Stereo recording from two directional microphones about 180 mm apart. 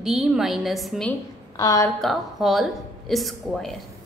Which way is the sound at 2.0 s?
Centre (ahead or behind).